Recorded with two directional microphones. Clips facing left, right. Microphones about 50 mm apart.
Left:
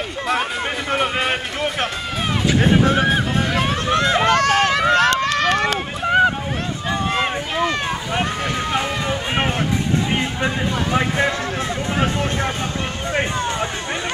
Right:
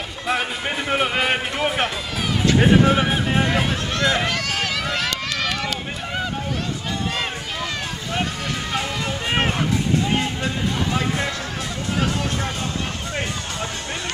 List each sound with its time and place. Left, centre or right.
0.8 s speech: centre
3.9 s speech: left
4.2 s run: left
10.1 s speech: left
13.1 s speech: left